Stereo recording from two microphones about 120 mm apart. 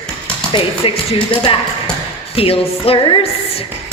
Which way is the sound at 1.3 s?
45° left (ahead or behind).